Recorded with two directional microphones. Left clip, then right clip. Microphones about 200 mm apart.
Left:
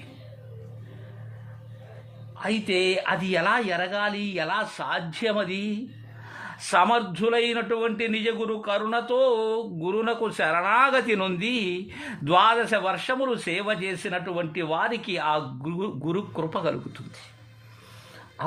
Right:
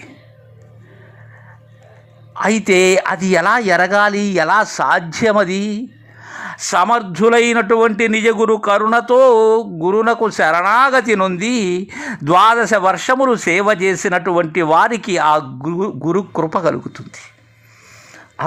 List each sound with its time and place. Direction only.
2.3 s a man's voice: 35° right (ahead or behind)